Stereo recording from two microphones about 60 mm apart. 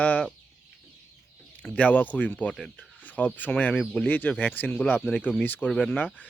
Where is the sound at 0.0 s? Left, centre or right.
Left.